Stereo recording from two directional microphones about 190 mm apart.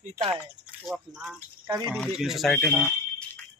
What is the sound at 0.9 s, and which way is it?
A man's voice, centre (ahead or behind).